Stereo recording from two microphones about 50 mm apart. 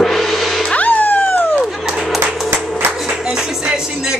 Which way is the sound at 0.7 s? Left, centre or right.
Left.